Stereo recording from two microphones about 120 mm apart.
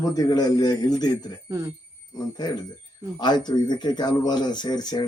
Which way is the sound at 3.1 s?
35° left (ahead or behind).